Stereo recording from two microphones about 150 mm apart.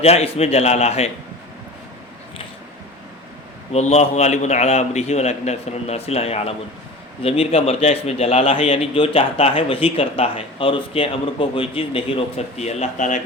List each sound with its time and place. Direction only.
0.0 s a man's voice: 45° left (ahead or behind)
3.7 s a man's voice: 45° left (ahead or behind)